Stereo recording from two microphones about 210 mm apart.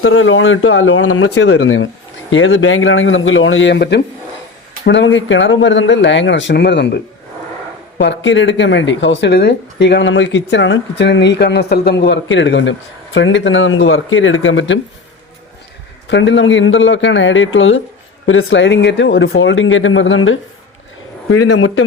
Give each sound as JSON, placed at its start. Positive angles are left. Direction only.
{"t": 0.0, "sound": "speech", "side_deg": 75}
{"t": 16.0, "sound": "speech", "side_deg": 60}
{"t": 21.2, "sound": "a man's voice", "side_deg": 90}